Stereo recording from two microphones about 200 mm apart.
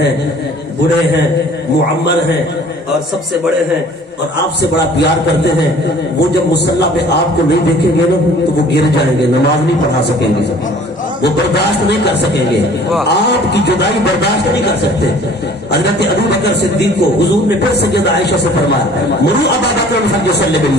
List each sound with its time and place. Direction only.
4.6 s speech: 55° left (ahead or behind)
6.5 s speech: 55° left (ahead or behind)
11.2 s speech: 55° left (ahead or behind)
13.1 s speech: 55° left (ahead or behind)
15.7 s speech: 55° left (ahead or behind)